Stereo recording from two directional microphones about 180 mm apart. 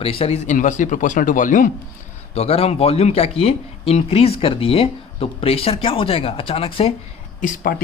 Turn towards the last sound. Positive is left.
turn(degrees=50)  # may be behind; listen again after turning